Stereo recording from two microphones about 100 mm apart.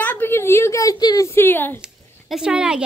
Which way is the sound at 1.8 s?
5° right (ahead or behind).